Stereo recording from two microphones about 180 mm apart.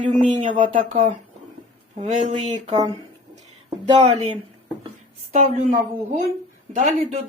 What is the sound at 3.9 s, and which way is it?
Speech, 35° right (ahead or behind).